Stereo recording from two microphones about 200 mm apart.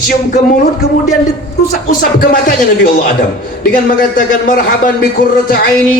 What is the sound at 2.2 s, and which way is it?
A man's voice, 45° left (ahead or behind).